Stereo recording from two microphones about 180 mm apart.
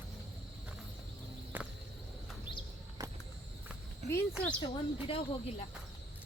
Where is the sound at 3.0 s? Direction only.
20° right (ahead or behind).